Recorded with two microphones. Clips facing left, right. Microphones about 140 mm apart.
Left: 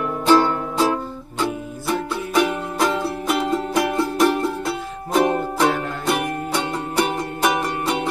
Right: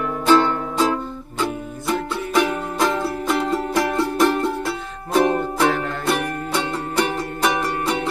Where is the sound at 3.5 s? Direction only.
20° left (ahead or behind).